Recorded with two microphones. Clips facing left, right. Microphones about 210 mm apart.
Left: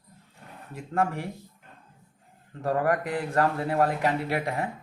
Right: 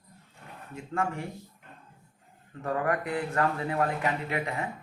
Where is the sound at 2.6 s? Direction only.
40° left (ahead or behind).